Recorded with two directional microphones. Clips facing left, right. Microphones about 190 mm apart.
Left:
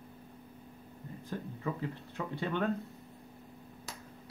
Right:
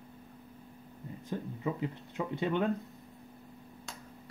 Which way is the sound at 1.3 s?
15° right (ahead or behind).